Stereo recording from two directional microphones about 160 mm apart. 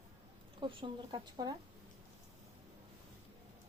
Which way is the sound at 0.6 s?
30° right (ahead or behind).